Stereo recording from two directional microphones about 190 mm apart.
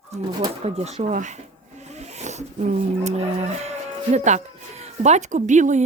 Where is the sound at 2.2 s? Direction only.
35° right (ahead or behind).